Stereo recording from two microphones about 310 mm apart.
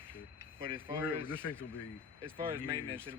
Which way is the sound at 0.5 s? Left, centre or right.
Centre.